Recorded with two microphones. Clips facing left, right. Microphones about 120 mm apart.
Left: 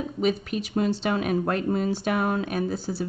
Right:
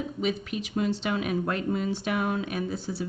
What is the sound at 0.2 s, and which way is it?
Speech, 40° left (ahead or behind).